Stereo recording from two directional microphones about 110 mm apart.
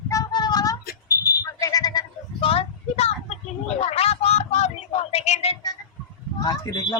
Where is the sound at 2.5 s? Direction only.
65° left (ahead or behind).